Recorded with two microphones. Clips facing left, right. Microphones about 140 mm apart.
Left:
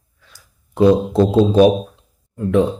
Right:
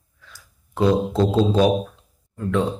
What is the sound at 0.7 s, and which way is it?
Speech, 20° left (ahead or behind).